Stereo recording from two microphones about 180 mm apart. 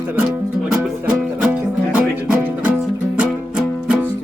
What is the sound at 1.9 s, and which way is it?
Music, 10° right (ahead or behind).